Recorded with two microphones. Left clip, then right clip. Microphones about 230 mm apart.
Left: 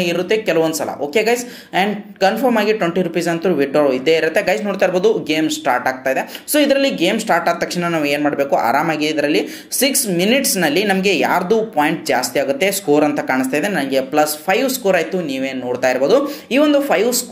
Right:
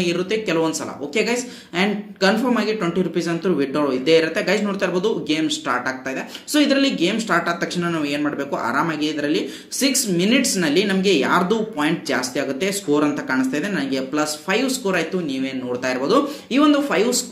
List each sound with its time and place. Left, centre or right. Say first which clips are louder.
0.0 s a woman's voice: left 5 dB; centre